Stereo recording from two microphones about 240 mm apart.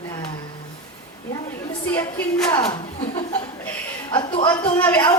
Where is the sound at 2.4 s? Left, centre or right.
Centre.